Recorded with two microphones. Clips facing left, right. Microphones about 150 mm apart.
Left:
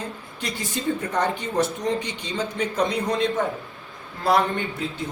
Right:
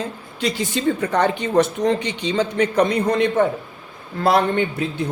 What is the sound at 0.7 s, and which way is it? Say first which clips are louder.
A man's voice: right 3 dB; 90° right.